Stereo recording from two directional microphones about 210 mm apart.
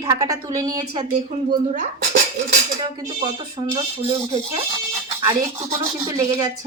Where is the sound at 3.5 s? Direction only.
25° right (ahead or behind).